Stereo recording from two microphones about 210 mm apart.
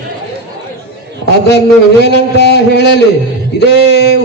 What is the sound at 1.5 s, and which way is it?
A man's voice, 50° left (ahead or behind).